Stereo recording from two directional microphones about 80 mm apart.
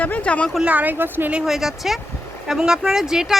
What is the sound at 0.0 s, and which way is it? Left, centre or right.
Speech, centre.